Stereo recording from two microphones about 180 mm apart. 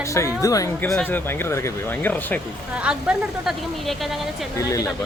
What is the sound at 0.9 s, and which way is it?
Speech, 5° left (ahead or behind).